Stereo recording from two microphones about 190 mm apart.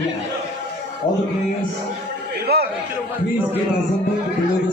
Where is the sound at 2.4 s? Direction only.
55° right (ahead or behind).